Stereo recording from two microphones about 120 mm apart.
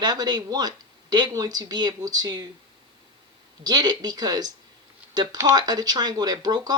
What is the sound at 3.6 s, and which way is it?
Speech, 35° right (ahead or behind).